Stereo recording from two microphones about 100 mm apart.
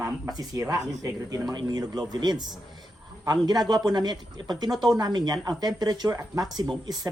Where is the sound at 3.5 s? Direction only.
45° right (ahead or behind).